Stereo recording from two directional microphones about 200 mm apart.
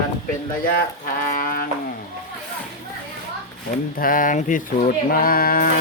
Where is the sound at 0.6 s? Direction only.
45° left (ahead or behind).